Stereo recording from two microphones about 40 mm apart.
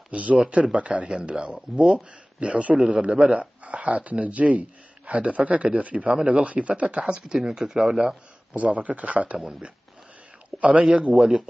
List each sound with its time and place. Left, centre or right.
0.1 s speech: right
7.4 s speech: centre
8.5 s speech: right
10.6 s speech: right
11.1 s speech: centre